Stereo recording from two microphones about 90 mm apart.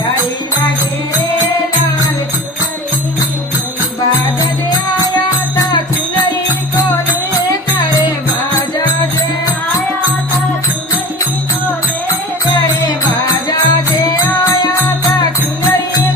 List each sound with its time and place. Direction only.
12.8 s music: 50° left (ahead or behind)
13.6 s music: 40° left (ahead or behind)